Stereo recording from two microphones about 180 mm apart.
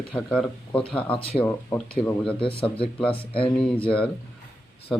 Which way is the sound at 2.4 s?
30° left (ahead or behind).